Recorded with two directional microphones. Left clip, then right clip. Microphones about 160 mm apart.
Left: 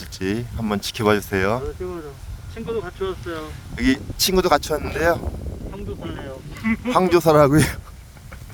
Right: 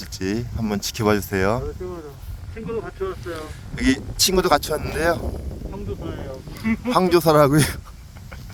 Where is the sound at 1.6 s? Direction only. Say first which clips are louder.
Left 2 dB; 90° left.